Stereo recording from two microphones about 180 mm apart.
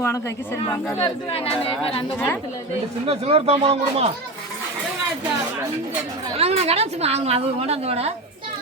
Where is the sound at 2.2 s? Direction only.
10° left (ahead or behind).